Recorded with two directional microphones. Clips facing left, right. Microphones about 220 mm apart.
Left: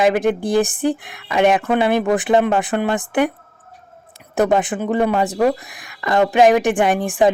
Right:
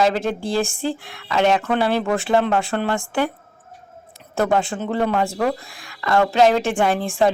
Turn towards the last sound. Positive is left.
turn(degrees=15)  # may be behind; listen again after turning